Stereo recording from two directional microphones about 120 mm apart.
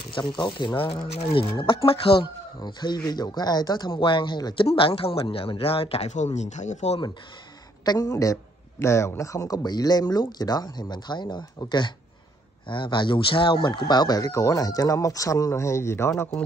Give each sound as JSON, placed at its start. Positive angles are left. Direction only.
{"t": 0.2, "sound": "speech", "side_deg": 40}
{"t": 2.6, "sound": "a man's voice", "side_deg": 35}
{"t": 4.6, "sound": "speech", "side_deg": 50}
{"t": 7.8, "sound": "a man's voice", "side_deg": 35}